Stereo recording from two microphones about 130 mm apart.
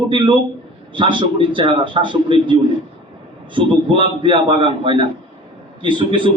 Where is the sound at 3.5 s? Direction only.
40° right (ahead or behind).